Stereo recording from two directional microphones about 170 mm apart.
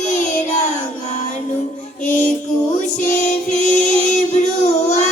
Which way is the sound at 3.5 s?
5° left (ahead or behind).